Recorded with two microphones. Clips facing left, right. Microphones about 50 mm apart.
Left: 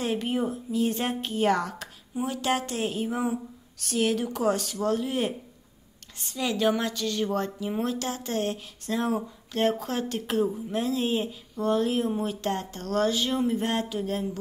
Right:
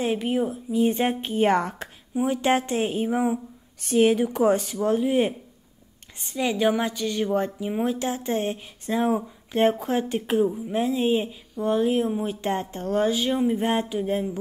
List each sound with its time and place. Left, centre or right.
0.0 s a woman's voice: centre
0.7 s a woman's voice: centre